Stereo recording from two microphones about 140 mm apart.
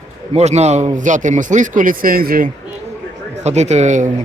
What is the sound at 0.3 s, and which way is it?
Speech, 55° right (ahead or behind).